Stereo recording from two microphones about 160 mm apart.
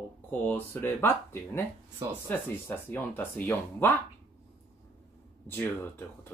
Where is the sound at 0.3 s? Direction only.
10° left (ahead or behind).